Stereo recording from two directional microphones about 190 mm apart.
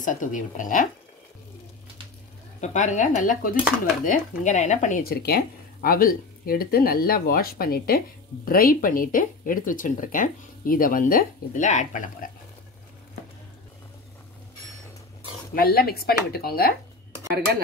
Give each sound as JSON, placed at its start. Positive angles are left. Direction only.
{"t": 0.0, "sound": "speech", "side_deg": 40}
{"t": 2.6, "sound": "a woman's voice", "side_deg": 40}
{"t": 15.5, "sound": "speech", "side_deg": 50}